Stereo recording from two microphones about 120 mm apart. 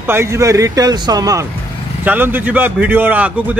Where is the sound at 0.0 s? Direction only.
20° right (ahead or behind).